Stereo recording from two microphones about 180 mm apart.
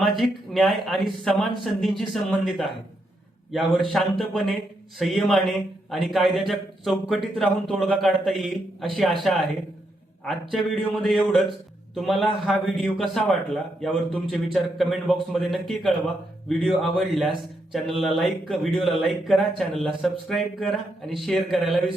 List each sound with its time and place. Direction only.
0.0 s a man's voice: centre (ahead or behind)
10.5 s a man's voice: centre (ahead or behind)